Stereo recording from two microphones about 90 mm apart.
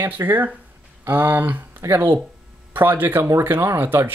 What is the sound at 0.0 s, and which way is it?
Speech, 20° right (ahead or behind).